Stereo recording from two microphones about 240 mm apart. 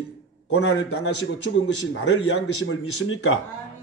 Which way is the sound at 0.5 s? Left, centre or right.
Left.